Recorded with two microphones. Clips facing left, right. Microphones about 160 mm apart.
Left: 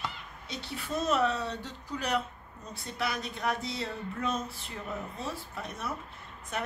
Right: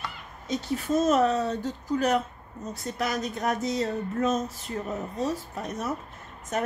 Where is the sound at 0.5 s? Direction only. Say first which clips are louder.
Right 10 dB; 45° right (ahead or behind).